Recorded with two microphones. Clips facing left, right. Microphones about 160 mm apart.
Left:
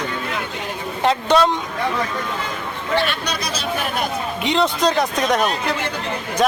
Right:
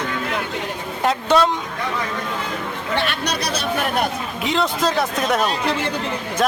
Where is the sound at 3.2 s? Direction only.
65° right (ahead or behind).